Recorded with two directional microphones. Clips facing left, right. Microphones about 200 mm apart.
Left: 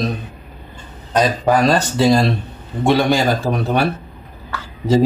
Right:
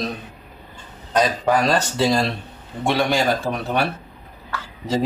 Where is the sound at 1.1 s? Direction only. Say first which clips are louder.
Left 3 dB; 40° left (ahead or behind).